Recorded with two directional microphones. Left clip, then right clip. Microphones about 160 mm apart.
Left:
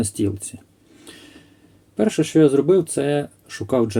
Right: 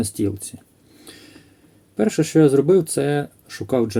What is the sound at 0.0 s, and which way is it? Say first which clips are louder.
Speech: even; 10° right (ahead or behind).